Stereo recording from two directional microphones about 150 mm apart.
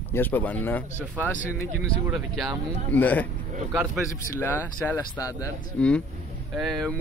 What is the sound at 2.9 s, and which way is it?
Speech, 10° left (ahead or behind).